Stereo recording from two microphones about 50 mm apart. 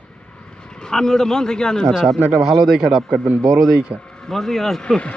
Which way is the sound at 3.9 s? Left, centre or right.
Right.